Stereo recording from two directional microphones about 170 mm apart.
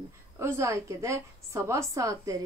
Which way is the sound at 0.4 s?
15° right (ahead or behind).